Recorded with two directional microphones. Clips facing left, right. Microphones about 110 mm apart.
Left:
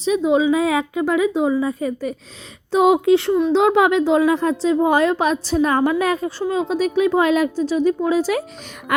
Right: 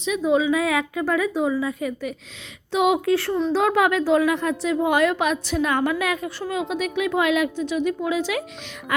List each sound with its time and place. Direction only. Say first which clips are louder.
0.0 s a woman's voice: left 4 dB; 30° left (ahead or behind)
3.0 s a woman's voice: left 6 dB; 20° left (ahead or behind); by 8.4 s 40° left (ahead or behind)
8.9 s speech: left 4 dB; 65° left (ahead or behind)